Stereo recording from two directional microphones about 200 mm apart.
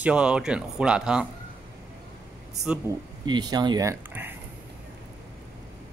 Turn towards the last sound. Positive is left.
turn(degrees=-10)  # may be behind; listen again after turning